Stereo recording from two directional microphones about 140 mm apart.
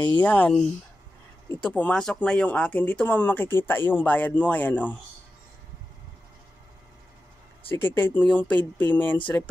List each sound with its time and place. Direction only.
0.0 s speech: 10° left (ahead or behind)
7.6 s speech: 15° left (ahead or behind)